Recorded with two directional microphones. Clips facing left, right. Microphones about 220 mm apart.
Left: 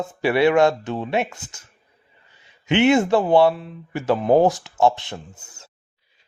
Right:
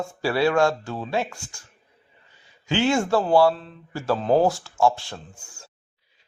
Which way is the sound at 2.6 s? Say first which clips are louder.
Left 5 dB; 20° left (ahead or behind).